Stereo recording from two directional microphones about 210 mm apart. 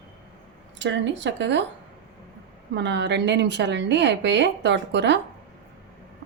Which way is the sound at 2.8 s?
55° right (ahead or behind).